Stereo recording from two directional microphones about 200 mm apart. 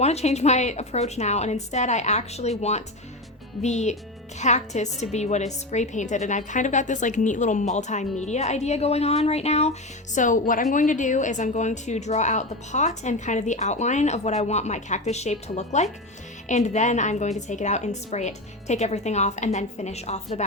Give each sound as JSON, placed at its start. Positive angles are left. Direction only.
{"t": 0.0, "sound": "a woman's voice", "side_deg": 35}